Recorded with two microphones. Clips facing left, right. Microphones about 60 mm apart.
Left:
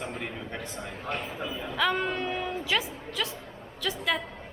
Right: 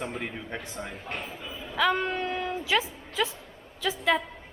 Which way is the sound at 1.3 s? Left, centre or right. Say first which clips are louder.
Left 5 dB; left.